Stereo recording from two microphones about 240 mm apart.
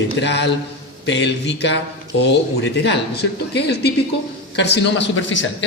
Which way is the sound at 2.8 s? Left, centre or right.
Left.